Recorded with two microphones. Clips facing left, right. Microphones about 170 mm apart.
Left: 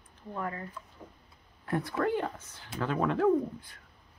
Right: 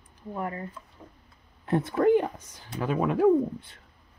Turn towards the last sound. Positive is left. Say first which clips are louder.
# right 4 dB
turn(degrees=-15)  # may be behind; listen again after turning